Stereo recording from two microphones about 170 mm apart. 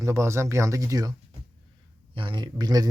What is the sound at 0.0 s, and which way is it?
Speech, 15° right (ahead or behind).